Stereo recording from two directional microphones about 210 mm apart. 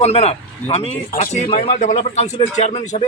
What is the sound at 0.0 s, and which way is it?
Speech, 30° left (ahead or behind).